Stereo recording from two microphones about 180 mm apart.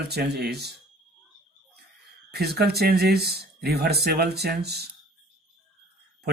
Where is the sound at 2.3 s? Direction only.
65° right (ahead or behind).